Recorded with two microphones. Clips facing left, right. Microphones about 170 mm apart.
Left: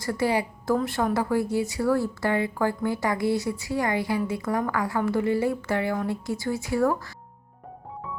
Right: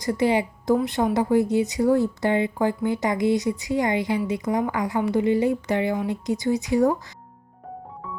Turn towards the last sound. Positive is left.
turn(degrees=-20)  # may be behind; listen again after turning